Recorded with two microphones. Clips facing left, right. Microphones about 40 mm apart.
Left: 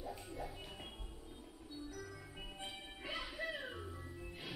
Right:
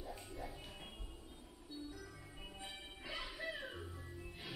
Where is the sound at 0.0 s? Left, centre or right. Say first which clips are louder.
Left 2 dB; centre.